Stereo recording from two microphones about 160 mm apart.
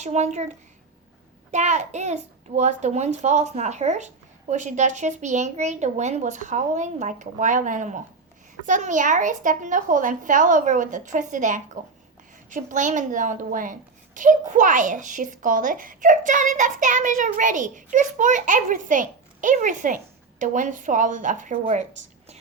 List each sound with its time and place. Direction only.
0.0 s a woman's voice: 45° right (ahead or behind)
1.5 s a woman's voice: 50° right (ahead or behind)
21.5 s speech: 40° right (ahead or behind)